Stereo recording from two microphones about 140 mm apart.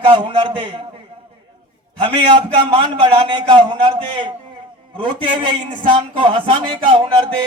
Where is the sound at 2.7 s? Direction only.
40° right (ahead or behind).